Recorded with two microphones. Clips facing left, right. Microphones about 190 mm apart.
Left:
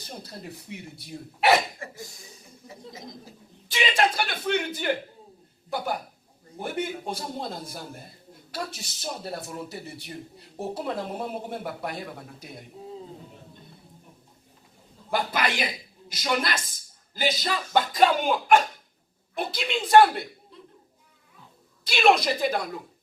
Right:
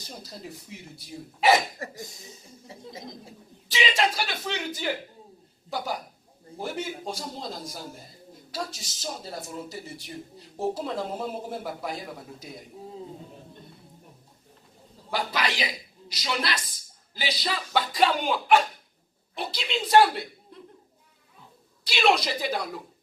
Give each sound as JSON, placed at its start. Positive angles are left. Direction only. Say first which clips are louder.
{"t": 0.0, "sound": "speech", "louder": "left 1 dB", "side_deg": 60}
{"t": 2.0, "sound": "speech", "louder": "right 1 dB", "side_deg": -20}
{"t": 3.7, "sound": "speech", "louder": "left 1 dB", "side_deg": 55}
{"t": 11.2, "sound": "speech", "louder": "even", "side_deg": 0}
{"t": 11.6, "sound": "speech", "louder": "even", "side_deg": 60}
{"t": 15.1, "sound": "a man's voice", "louder": "left 2 dB", "side_deg": 50}
{"t": 21.8, "sound": "a man's voice", "louder": "left 2 dB", "side_deg": 50}